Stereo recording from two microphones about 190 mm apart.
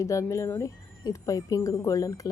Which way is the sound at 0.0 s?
15° left (ahead or behind).